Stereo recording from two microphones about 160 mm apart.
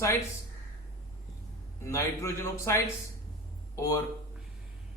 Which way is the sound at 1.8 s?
20° left (ahead or behind).